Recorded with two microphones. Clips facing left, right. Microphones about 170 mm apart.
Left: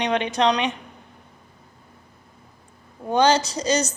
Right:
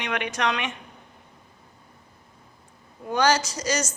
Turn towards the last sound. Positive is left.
turn(degrees=30)  # may be behind; listen again after turning